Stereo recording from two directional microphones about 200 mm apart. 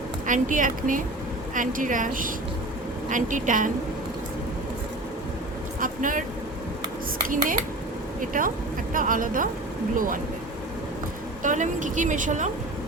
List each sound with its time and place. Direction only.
0.3 s a woman's voice: 40° right (ahead or behind)
5.8 s speech: 40° right (ahead or behind)
7.3 s a woman's voice: 45° right (ahead or behind)
11.4 s a woman's voice: 40° right (ahead or behind)